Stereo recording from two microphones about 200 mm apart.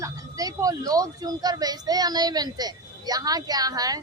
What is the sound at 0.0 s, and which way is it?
Speech, 15° right (ahead or behind).